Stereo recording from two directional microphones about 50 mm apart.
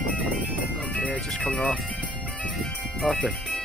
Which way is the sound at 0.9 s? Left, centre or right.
Left.